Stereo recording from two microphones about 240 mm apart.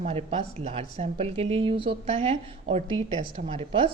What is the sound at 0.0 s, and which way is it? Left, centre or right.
Speech, right.